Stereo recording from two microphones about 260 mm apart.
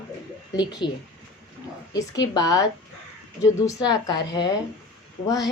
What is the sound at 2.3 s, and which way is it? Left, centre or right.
A woman's voice, centre.